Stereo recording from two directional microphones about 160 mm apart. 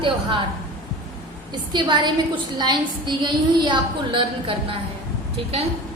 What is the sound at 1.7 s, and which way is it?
A woman's voice, 30° right (ahead or behind).